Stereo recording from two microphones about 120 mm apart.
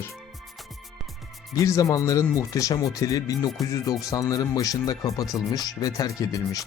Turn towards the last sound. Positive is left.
turn(degrees=30)  # may be behind; listen again after turning